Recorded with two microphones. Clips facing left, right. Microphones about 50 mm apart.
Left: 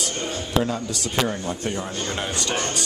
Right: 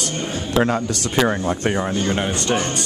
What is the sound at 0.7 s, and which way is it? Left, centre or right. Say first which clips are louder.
Speech: right 6 dB; right.